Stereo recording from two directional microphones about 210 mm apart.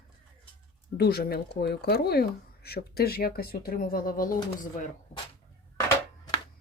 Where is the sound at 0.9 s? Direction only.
50° left (ahead or behind).